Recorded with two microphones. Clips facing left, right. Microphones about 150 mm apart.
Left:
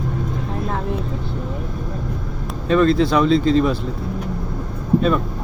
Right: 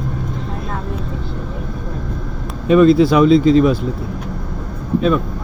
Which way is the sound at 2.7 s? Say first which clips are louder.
Right 5 dB; 10° right (ahead or behind).